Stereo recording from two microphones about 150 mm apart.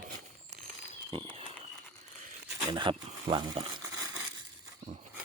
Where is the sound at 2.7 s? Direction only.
35° right (ahead or behind).